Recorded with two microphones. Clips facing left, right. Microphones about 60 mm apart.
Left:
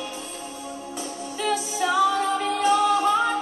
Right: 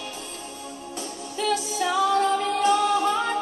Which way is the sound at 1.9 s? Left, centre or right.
Centre.